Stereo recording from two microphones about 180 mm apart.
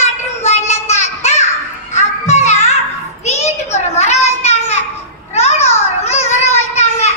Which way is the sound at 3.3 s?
40° left (ahead or behind).